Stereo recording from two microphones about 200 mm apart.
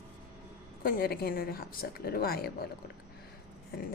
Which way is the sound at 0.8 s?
45° left (ahead or behind).